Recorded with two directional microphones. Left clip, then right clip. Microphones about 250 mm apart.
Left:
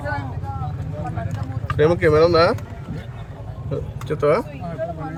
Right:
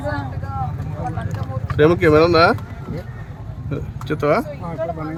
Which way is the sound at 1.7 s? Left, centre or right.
Centre.